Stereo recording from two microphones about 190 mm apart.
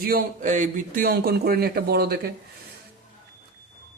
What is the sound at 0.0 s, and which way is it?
Speech, 50° right (ahead or behind).